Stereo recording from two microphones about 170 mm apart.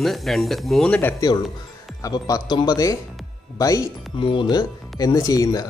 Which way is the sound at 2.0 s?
25° left (ahead or behind).